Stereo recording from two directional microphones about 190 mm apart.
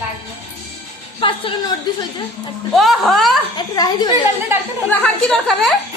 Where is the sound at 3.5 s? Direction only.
20° left (ahead or behind).